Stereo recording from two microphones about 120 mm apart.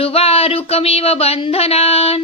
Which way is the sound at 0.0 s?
55° left (ahead or behind).